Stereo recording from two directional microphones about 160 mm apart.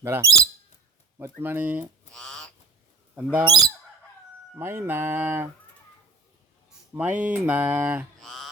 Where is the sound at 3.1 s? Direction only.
10° right (ahead or behind).